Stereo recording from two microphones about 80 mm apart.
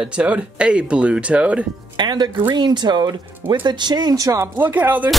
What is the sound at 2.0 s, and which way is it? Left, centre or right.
Speech, right.